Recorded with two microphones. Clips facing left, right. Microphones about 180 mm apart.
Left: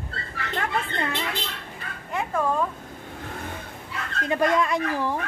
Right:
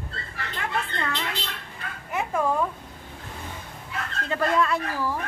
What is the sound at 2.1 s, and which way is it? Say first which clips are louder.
Speech: even; 10° right (ahead or behind).